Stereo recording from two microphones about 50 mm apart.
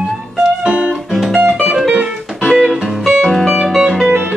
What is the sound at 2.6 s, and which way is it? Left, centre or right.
Music, centre.